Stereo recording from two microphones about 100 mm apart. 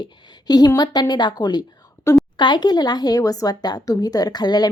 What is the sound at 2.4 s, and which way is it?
Speech, 45° left (ahead or behind).